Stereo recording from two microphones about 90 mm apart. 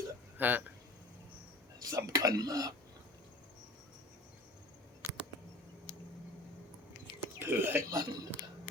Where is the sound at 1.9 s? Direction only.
40° right (ahead or behind).